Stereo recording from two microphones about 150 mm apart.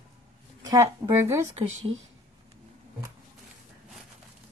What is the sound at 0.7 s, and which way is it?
Speech, 20° right (ahead or behind).